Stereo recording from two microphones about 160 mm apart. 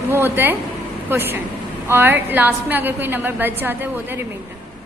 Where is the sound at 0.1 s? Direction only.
15° right (ahead or behind).